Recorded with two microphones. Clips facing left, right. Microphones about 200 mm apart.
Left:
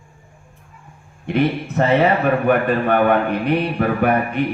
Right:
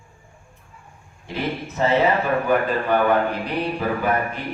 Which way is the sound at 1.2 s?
60° left (ahead or behind).